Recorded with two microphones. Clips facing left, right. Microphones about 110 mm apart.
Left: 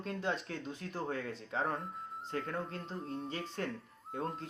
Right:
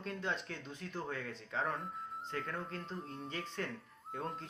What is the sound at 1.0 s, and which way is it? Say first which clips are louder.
Speech: left 6 dB; 40° left (ahead or behind).